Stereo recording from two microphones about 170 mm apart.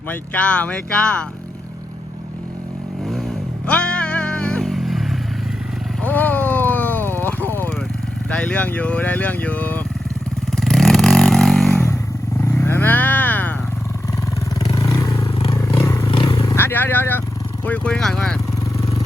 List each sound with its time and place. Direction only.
0.1 s speech: 5° left (ahead or behind)
3.7 s music: 5° left (ahead or behind)
6.0 s vehicle: 10° left (ahead or behind)
8.3 s speech: 5° left (ahead or behind)
10.5 s vehicle: centre (ahead or behind)
12.5 s vehicle: 15° left (ahead or behind)
14.7 s vehicle: 20° left (ahead or behind)
16.1 s a sound: 30° left (ahead or behind)
16.6 s vehicle: 10° left (ahead or behind)
17.7 s speech: 5° left (ahead or behind)